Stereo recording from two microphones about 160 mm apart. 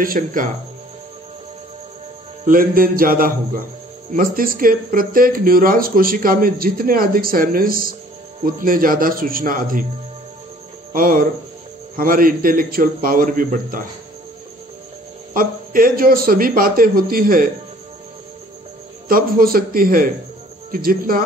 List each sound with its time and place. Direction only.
0.0 s speech: 60° right (ahead or behind)
2.4 s speech: 60° right (ahead or behind)
10.9 s speech: 60° right (ahead or behind)
15.3 s speech: 60° right (ahead or behind)
19.0 s speech: 65° right (ahead or behind)